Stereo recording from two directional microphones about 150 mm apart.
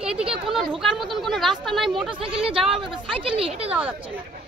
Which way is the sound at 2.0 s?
35° right (ahead or behind).